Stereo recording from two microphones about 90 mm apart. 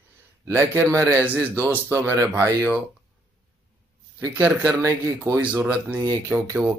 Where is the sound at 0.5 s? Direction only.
25° right (ahead or behind).